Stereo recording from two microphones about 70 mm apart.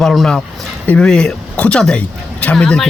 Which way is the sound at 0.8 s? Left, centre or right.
Centre.